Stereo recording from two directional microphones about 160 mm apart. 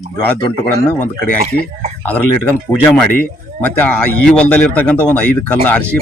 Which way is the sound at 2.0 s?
10° left (ahead or behind).